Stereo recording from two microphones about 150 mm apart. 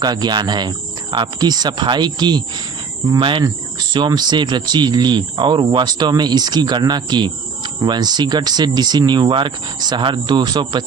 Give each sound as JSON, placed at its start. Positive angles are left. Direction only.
{"t": 0.0, "sound": "speech", "side_deg": -25}
{"t": 3.1, "sound": "cricket", "side_deg": -35}
{"t": 3.4, "sound": "speech", "side_deg": -30}